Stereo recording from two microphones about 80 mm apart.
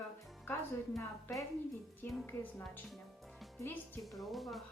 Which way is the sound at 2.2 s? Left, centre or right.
Left.